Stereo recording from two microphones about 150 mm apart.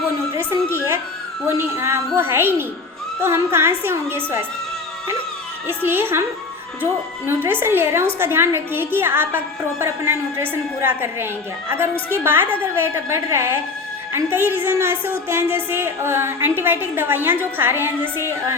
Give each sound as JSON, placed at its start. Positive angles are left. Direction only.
{"t": 0.3, "sound": "a sound", "side_deg": -15}
{"t": 1.5, "sound": "a woman's voice", "side_deg": -15}
{"t": 5.6, "sound": "a woman's voice", "side_deg": -15}
{"t": 7.3, "sound": "a woman's voice", "side_deg": -15}